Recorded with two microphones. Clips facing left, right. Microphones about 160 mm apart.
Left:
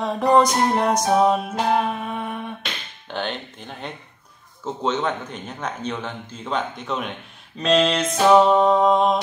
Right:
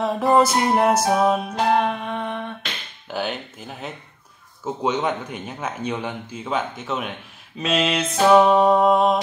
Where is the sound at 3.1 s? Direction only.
5° right (ahead or behind).